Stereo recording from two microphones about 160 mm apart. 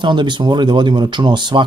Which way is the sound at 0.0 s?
30° right (ahead or behind).